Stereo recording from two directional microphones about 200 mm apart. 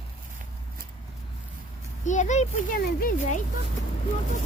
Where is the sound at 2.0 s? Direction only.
35° left (ahead or behind).